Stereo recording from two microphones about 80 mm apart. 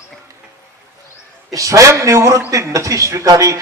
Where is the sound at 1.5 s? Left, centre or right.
Right.